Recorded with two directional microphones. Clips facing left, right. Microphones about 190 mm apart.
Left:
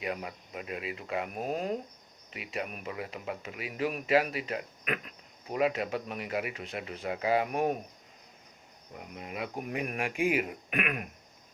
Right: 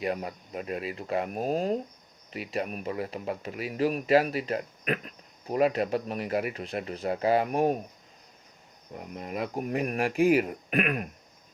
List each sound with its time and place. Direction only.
0.0 s speech: 40° right (ahead or behind)
9.0 s speech: 40° right (ahead or behind)